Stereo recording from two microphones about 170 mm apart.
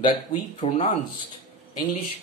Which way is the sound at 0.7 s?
35° left (ahead or behind).